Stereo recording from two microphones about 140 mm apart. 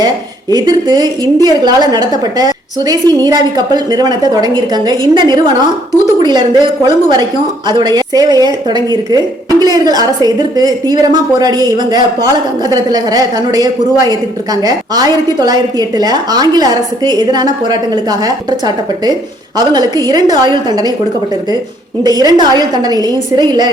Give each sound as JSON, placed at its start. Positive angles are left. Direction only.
{"t": 0.5, "sound": "a woman's voice", "side_deg": -30}
{"t": 22.0, "sound": "speech", "side_deg": -25}